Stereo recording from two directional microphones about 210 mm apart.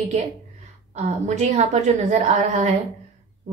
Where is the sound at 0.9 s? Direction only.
35° right (ahead or behind).